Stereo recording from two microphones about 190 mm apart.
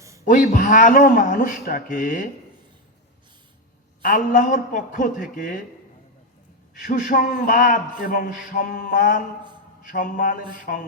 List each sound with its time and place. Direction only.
0.3 s a man's voice: 45° left (ahead or behind)
4.0 s a man's voice: 45° left (ahead or behind)
6.8 s a man's voice: 45° left (ahead or behind)